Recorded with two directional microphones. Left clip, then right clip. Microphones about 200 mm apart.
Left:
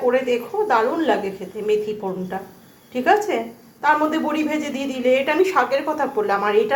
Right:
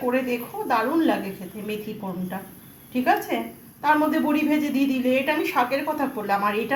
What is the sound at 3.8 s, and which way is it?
A woman's voice, 20° left (ahead or behind).